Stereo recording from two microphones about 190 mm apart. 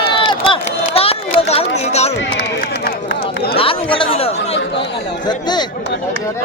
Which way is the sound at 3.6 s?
30° left (ahead or behind).